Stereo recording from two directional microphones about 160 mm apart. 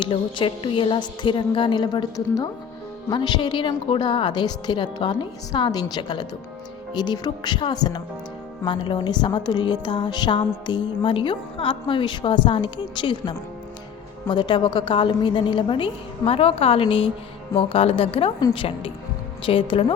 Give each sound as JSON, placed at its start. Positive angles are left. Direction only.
{"t": 0.0, "sound": "a woman's voice", "side_deg": 30}